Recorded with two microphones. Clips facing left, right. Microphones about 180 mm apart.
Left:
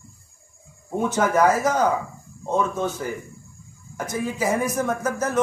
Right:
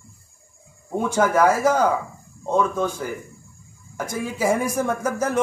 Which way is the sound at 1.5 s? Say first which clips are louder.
Right 2 dB; 10° right (ahead or behind).